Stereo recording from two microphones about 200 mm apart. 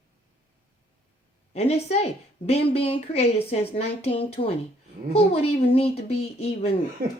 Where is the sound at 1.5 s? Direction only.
30° left (ahead or behind).